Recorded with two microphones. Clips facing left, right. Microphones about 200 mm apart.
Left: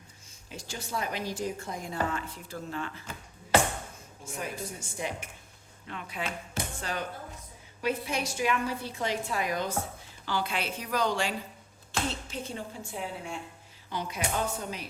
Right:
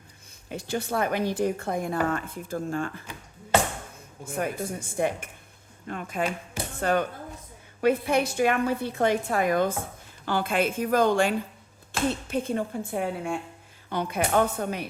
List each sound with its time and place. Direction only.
0.4 s a woman's voice: 60° right (ahead or behind)
4.3 s a woman's voice: 55° right (ahead or behind)